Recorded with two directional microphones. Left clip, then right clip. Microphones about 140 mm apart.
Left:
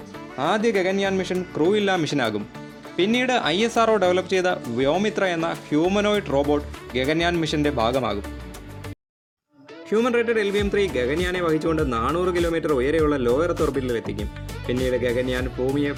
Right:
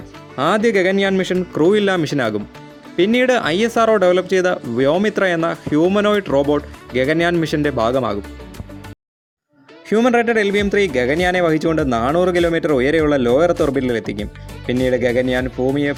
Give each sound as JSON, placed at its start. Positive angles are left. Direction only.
{"t": 0.3, "sound": "speech", "side_deg": -40}
{"t": 9.9, "sound": "speech", "side_deg": -50}